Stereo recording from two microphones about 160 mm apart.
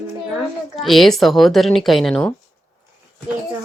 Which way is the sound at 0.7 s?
Centre (ahead or behind).